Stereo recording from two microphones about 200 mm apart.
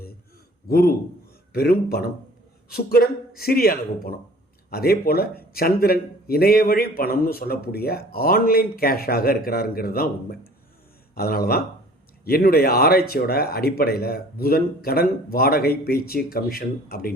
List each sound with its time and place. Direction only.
0.7 s a man's voice: 50° left (ahead or behind)
11.1 s a man's voice: 50° left (ahead or behind)